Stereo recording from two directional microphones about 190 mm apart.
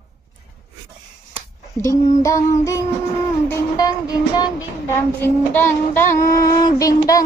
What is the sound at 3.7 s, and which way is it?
Music, 20° left (ahead or behind).